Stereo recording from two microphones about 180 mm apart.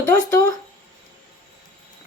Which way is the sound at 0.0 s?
15° left (ahead or behind).